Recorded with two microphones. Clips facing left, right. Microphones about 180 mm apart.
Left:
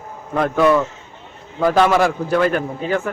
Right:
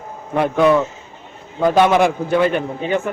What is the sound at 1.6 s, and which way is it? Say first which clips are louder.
Speech: right 1 dB; 20° right (ahead or behind).